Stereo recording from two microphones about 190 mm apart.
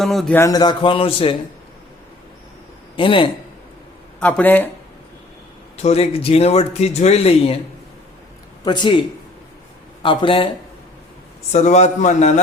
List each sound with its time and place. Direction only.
0.0 s speech: centre (ahead or behind)
0.3 s a man's voice: 20° left (ahead or behind)
2.9 s a man's voice: 25° left (ahead or behind)
4.2 s speech: 10° left (ahead or behind)
5.7 s a man's voice: 35° left (ahead or behind)
8.6 s a man's voice: 25° left (ahead or behind)
11.5 s a man's voice: 35° left (ahead or behind)